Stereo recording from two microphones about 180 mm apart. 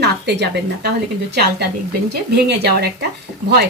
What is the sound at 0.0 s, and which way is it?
Speech, 70° right (ahead or behind).